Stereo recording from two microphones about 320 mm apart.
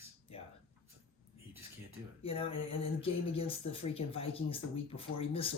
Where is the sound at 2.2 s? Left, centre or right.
Centre.